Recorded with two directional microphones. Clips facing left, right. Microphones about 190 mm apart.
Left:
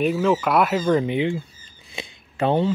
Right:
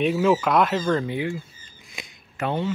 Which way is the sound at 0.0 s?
Centre (ahead or behind).